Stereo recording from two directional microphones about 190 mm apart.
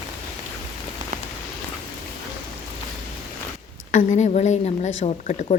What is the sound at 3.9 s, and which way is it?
A woman's voice, 40° left (ahead or behind).